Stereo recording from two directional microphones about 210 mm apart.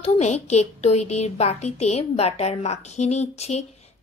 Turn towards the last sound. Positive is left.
turn(degrees=30)  # may be behind; listen again after turning